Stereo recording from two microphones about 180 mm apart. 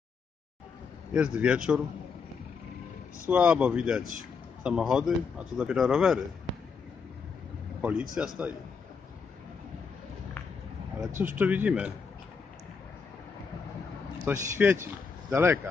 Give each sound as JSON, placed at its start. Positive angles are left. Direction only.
{"t": 1.1, "sound": "a man's voice", "side_deg": -5}
{"t": 3.3, "sound": "a man's voice", "side_deg": -5}
{"t": 7.8, "sound": "a man's voice", "side_deg": -5}
{"t": 11.1, "sound": "speech", "side_deg": -10}
{"t": 14.2, "sound": "speech", "side_deg": -10}